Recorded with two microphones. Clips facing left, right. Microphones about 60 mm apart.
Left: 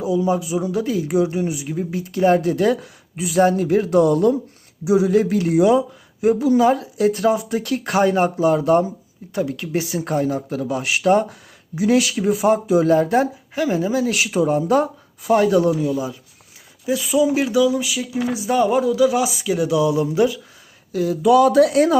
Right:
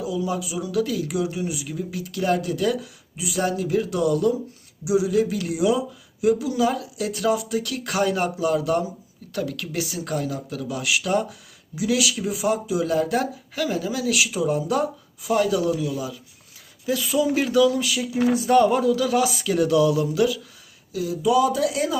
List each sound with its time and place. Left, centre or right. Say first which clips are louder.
0.0 s speech: left 6 dB; left
9.3 s speech: left 5 dB; left
16.8 s speech: left 4 dB; centre
20.9 s speech: left 6 dB; left